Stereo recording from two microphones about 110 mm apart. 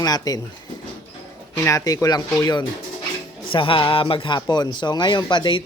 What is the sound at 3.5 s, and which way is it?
A woman's voice, 50° left (ahead or behind).